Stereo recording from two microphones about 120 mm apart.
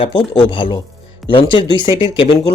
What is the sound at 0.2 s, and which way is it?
Speech, 45° left (ahead or behind).